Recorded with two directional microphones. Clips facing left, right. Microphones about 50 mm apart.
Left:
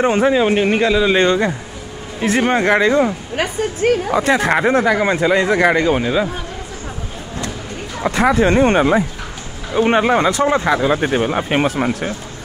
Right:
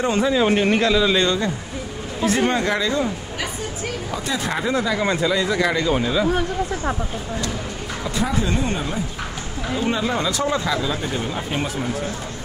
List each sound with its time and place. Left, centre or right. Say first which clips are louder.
0.0 s speech: left 5 dB; left
0.4 s a man's voice: left 3 dB; centre
1.1 s speech: left 5 dB; left
3.3 s speech: left 8 dB; left
5.0 s speech: left 4 dB; left
5.3 s speech: left 6 dB; left
5.9 s speech: left 4 dB; left
8.0 s speech: left 10 dB; left
9.8 s speech: left 9 dB; left